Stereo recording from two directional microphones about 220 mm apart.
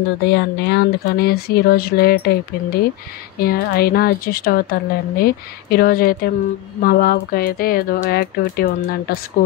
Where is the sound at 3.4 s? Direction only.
45° left (ahead or behind).